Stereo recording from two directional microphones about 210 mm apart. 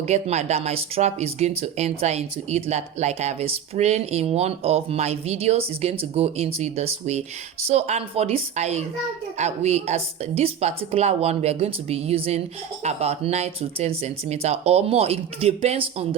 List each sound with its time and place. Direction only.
0.1 s speech: 30° right (ahead or behind)